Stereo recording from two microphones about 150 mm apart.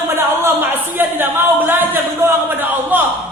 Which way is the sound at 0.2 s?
15° right (ahead or behind).